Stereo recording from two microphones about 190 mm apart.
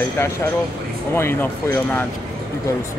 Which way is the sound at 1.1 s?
10° left (ahead or behind).